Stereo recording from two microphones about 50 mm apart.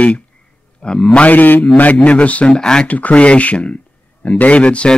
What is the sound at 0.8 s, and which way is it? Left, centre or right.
Speech, centre.